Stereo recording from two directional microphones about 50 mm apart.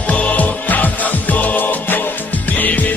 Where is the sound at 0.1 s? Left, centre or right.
Left.